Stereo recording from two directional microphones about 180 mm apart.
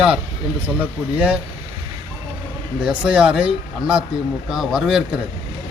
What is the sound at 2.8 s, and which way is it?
A man's voice, 5° right (ahead or behind).